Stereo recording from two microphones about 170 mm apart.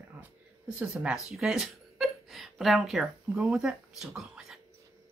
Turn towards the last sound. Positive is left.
turn(degrees=-5)  # may be behind; listen again after turning